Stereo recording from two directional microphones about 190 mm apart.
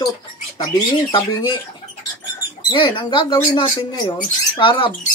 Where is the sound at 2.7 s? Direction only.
25° left (ahead or behind).